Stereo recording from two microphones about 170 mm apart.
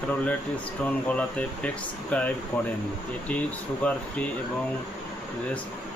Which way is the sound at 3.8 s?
10° left (ahead or behind).